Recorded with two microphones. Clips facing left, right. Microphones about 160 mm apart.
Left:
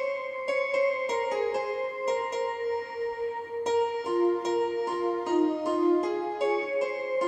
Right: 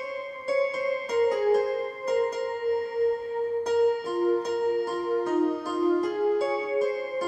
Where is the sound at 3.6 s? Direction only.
20° left (ahead or behind).